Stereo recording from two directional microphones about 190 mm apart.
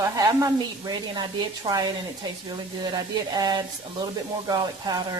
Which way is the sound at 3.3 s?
20° right (ahead or behind).